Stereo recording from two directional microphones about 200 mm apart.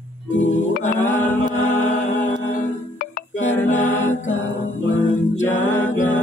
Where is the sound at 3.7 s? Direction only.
40° left (ahead or behind).